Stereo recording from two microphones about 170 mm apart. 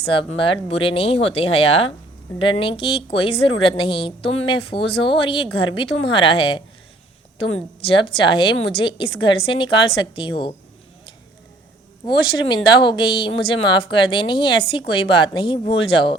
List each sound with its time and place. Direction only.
0.0 s a woman's voice: 35° left (ahead or behind)
12.0 s a woman's voice: 30° left (ahead or behind)